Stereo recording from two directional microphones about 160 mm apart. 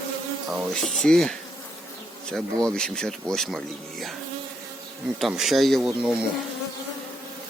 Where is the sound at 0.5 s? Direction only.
Centre (ahead or behind).